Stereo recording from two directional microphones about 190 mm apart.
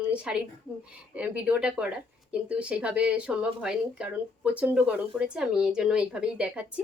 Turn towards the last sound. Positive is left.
turn(degrees=-5)  # may be behind; listen again after turning